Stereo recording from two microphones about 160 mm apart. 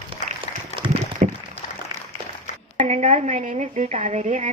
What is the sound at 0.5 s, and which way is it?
Applause, 45° left (ahead or behind).